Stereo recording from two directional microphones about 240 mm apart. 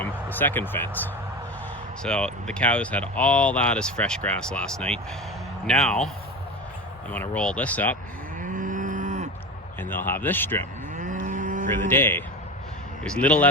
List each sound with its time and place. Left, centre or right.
0.0 s speech: centre
7.1 s speech: centre
8.4 s moo: right
9.8 s speech: centre
10.9 s moo: right
11.9 s speech: centre